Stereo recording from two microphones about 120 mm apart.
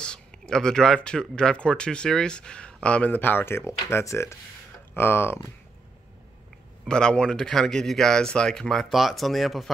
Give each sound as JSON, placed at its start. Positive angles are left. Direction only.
{"t": 0.0, "sound": "speech", "side_deg": 5}
{"t": 6.9, "sound": "speech", "side_deg": 5}